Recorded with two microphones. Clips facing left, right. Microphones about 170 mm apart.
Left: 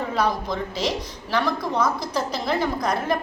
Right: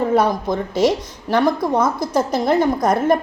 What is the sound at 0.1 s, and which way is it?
A woman's voice, 50° right (ahead or behind).